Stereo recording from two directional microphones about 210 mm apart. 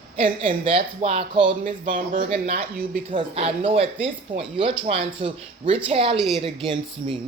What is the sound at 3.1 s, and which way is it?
Speech, 25° right (ahead or behind).